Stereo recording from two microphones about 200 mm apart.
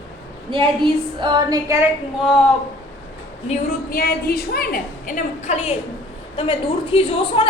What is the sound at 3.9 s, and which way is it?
A woman's voice, 50° left (ahead or behind).